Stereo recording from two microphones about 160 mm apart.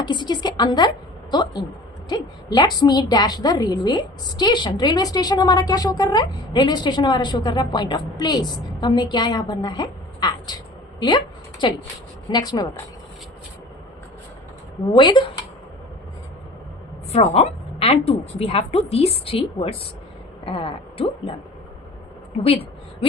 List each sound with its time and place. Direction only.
0.0 s a woman's voice: 30° left (ahead or behind)
11.6 s a woman's voice: 30° left (ahead or behind)
14.9 s a woman's voice: 30° left (ahead or behind)
17.1 s a woman's voice: 40° left (ahead or behind)